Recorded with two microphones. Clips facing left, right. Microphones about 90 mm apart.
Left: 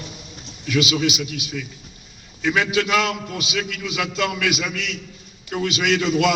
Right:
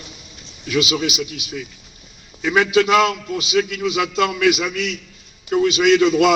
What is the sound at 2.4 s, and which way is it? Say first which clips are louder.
A man's voice: right 4 dB; 35° right (ahead or behind).